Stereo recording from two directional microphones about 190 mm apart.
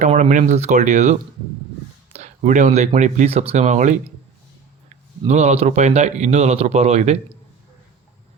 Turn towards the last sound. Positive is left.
turn(degrees=-35)  # may be behind; listen again after turning